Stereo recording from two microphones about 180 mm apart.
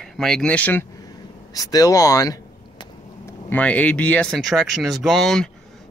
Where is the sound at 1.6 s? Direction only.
20° left (ahead or behind).